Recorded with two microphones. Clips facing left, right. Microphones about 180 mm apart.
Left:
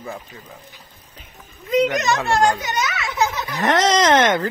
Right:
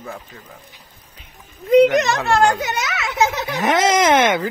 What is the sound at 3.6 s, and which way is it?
Speech, 10° right (ahead or behind).